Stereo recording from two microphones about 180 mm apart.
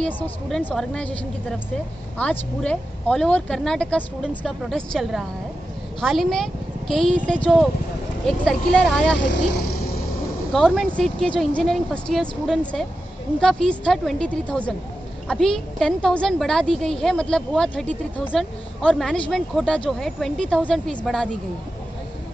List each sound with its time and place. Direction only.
0.0 s speech: 5° left (ahead or behind)
9.3 s speech: 65° left (ahead or behind)
10.5 s speech: centre (ahead or behind)